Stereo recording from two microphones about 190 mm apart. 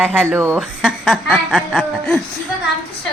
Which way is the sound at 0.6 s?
5° left (ahead or behind).